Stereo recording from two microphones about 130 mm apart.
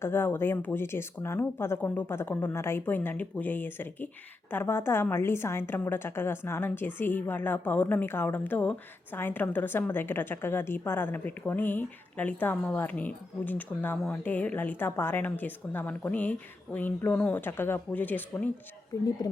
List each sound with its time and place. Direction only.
0.0 s a woman's voice: 15° left (ahead or behind)
18.9 s a woman's voice: 25° left (ahead or behind)